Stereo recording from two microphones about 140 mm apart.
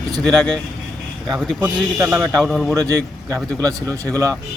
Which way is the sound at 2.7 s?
25° right (ahead or behind).